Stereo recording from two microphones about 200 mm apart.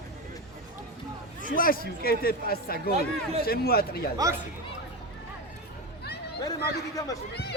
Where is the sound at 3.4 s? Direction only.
50° left (ahead or behind).